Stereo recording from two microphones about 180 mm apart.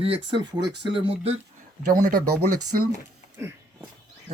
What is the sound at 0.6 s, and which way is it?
Speech, 70° right (ahead or behind).